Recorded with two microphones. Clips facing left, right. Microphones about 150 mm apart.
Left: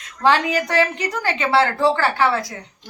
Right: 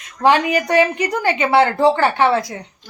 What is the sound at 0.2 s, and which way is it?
A woman's voice, 15° right (ahead or behind).